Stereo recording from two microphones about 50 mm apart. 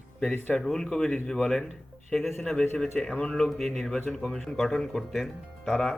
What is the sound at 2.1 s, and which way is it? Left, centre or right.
Speech, centre.